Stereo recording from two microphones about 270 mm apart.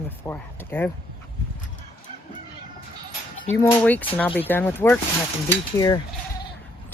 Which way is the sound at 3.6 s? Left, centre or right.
Centre.